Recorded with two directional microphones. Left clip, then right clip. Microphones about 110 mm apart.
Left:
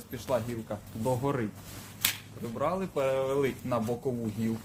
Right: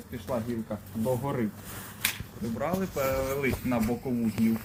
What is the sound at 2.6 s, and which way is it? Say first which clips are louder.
Speech: left 1 dB; 35° left (ahead or behind).